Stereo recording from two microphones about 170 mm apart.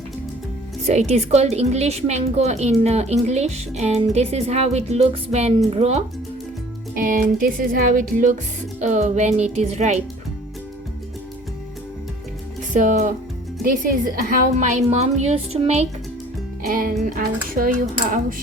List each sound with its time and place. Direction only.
0.9 s a woman's voice: 40° right (ahead or behind)
6.9 s music: 55° right (ahead or behind)
8.8 s a woman's voice: 40° right (ahead or behind)
12.7 s music: 50° right (ahead or behind)
13.8 s a woman's voice: 55° right (ahead or behind)
16.6 s speech: 55° right (ahead or behind)